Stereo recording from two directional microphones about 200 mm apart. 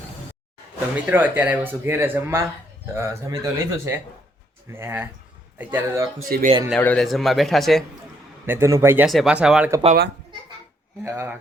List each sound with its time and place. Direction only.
0.9 s speech: 10° right (ahead or behind)
6.2 s speech: 45° right (ahead or behind)
6.7 s a man's voice: 5° left (ahead or behind)
8.4 s speech: 15° right (ahead or behind)
9.0 s a man's voice: centre (ahead or behind)
11.0 s speech: 15° right (ahead or behind)